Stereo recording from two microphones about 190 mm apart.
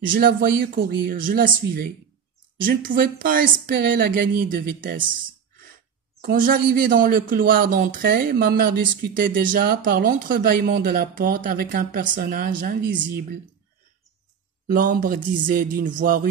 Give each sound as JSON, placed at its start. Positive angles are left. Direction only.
{"t": 0.1, "sound": "speech", "side_deg": -50}
{"t": 6.2, "sound": "speech", "side_deg": -50}
{"t": 14.7, "sound": "speech", "side_deg": -45}